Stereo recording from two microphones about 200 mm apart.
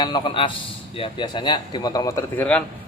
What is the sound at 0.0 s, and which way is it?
A man's voice, 25° left (ahead or behind).